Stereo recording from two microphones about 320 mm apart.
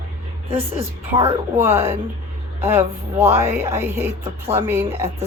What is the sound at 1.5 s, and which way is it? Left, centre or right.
A woman's voice, centre.